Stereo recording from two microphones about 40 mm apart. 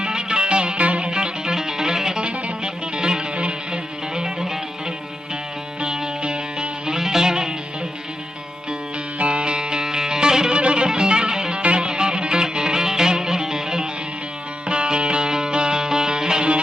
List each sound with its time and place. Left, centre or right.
0.0 s music: centre
5.8 s music: right
9.1 s music: right